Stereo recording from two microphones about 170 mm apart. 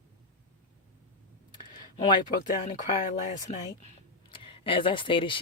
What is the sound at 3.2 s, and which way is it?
Speech, 40° left (ahead or behind).